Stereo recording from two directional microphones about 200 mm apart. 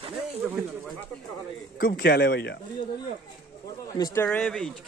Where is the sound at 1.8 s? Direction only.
50° left (ahead or behind).